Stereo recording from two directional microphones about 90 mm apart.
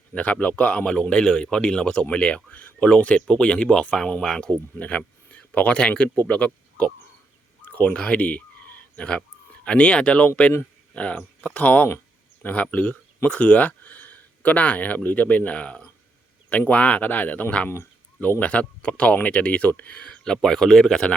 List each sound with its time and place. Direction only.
0.1 s a man's voice: 15° left (ahead or behind)